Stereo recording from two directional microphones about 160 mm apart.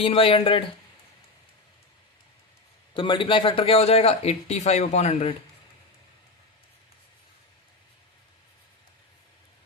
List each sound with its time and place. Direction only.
0.0 s a man's voice: 35° left (ahead or behind)
2.9 s a man's voice: 30° left (ahead or behind)